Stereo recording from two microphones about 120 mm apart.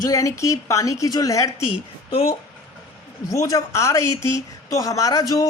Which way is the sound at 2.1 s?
50° left (ahead or behind).